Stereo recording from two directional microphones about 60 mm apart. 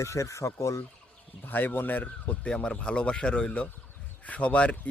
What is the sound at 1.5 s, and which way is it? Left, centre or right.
Speech, left.